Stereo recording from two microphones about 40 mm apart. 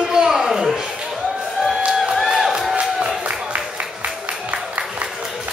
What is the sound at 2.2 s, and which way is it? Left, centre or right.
Music, centre.